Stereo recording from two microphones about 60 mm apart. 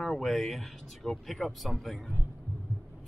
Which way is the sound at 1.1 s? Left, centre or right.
Centre.